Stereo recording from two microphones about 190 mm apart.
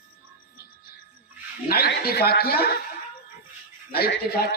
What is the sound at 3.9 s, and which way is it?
Speech, 55° left (ahead or behind).